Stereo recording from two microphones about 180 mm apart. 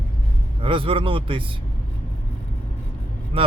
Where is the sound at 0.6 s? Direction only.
30° right (ahead or behind).